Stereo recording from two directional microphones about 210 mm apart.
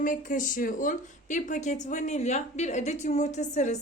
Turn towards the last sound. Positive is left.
turn(degrees=35)  # may be behind; listen again after turning